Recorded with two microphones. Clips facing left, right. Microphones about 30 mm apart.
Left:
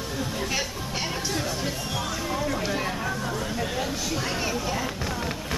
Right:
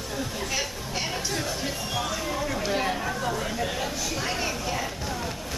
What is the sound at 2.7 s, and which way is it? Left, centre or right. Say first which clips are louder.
Speech: right 1 dB; centre.